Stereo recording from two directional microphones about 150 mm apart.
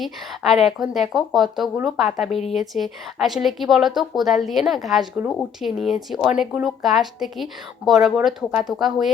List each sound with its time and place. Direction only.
0.6 s a woman's voice: centre (ahead or behind)
2.3 s speech: 45° left (ahead or behind)
2.6 s a woman's voice: centre (ahead or behind)